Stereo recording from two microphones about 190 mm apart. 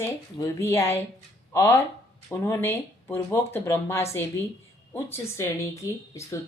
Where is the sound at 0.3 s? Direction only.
15° left (ahead or behind).